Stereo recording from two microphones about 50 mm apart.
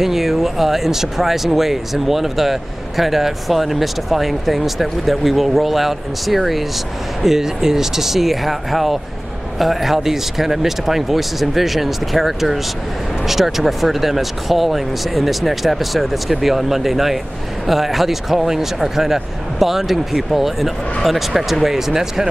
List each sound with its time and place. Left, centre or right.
0.0 s speech: centre